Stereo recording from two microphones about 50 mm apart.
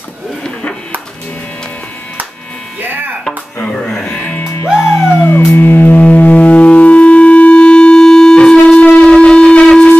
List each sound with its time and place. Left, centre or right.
2.8 s music: right
3.6 s music: centre
4.1 s music: left
4.7 s music: left
5.9 s music: left